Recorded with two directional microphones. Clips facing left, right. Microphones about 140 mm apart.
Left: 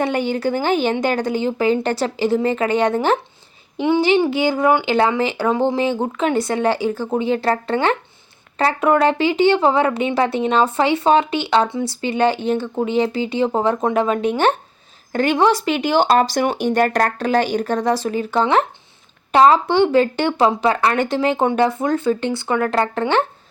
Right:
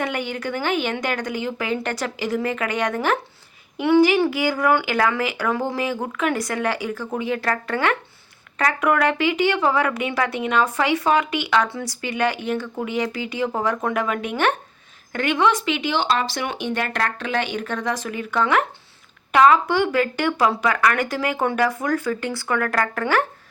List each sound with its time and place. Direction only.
0.0 s speech: 30° left (ahead or behind)